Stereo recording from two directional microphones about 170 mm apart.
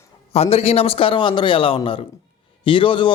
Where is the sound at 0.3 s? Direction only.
35° left (ahead or behind).